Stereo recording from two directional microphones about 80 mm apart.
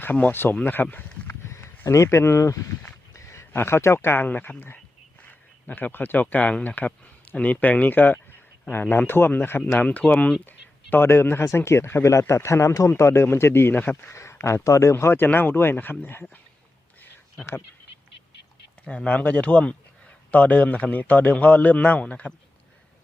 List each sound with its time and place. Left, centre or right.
0.0 s a man's voice: left
10.4 s speech: left
14.1 s a sound: left
14.4 s a man's voice: left
18.9 s a man's voice: centre